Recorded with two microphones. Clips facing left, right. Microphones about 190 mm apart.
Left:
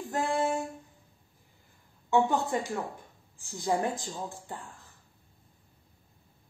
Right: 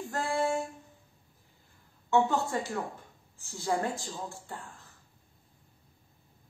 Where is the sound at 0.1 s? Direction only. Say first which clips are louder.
Left 1 dB; 20° left (ahead or behind).